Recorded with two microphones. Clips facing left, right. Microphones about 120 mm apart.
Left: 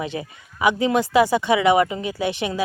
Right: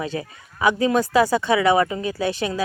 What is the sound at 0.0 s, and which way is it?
Speech, 20° left (ahead or behind).